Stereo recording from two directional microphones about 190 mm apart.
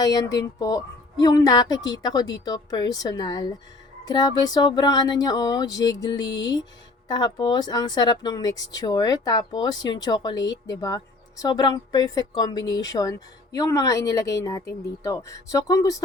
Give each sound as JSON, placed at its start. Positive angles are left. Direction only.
{"t": 0.0, "sound": "speech", "side_deg": 20}